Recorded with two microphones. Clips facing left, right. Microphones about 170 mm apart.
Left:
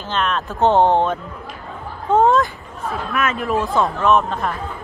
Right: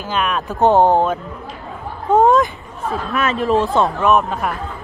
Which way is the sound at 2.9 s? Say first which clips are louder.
Right 2 dB; 35° right (ahead or behind).